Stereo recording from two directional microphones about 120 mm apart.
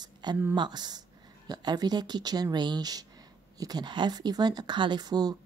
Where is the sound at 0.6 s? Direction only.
35° right (ahead or behind).